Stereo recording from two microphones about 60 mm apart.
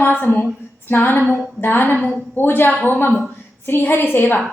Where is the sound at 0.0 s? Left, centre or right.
Left.